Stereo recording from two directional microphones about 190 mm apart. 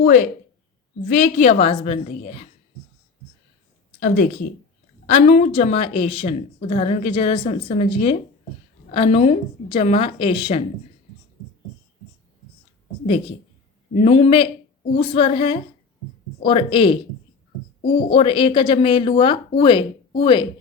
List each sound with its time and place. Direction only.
1.0 s a woman's voice: 45° left (ahead or behind)
4.0 s a woman's voice: 45° left (ahead or behind); by 10.6 s 30° left (ahead or behind)
13.1 s a woman's voice: 30° left (ahead or behind)